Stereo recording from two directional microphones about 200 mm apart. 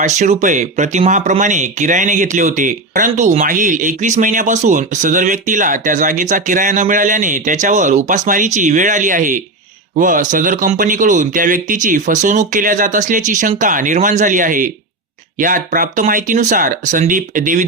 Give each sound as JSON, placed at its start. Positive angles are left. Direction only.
{"t": 0.0, "sound": "speech", "side_deg": -35}